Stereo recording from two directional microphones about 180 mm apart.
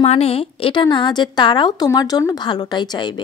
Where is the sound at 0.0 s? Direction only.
35° left (ahead or behind).